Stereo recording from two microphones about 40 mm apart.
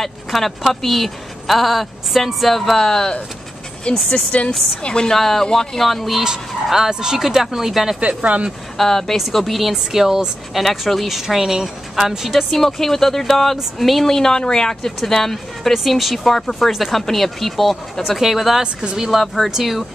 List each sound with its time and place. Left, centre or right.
0.0 s speech: centre
4.1 s speech: left
4.8 s a woman's voice: left
5.1 s speech: centre
6.2 s speech: centre
8.0 s speech: right
8.7 s speech: centre
10.6 s speech: centre
11.1 s speech: centre
15.7 s speech: centre
18.6 s speech: right
18.9 s speech: centre
19.2 s speech: centre